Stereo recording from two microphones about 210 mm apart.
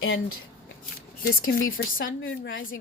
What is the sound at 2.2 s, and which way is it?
Speech, 65° left (ahead or behind).